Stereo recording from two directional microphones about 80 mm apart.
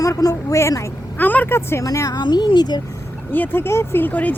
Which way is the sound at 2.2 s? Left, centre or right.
Left.